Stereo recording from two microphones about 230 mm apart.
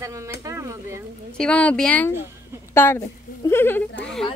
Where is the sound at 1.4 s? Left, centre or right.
Centre.